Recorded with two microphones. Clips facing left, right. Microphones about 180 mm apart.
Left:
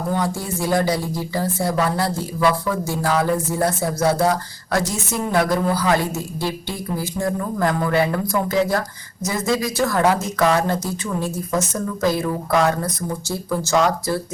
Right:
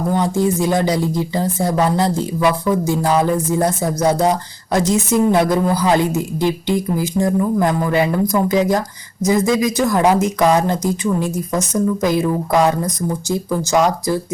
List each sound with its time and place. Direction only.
0.1 s a woman's voice: 20° right (ahead or behind)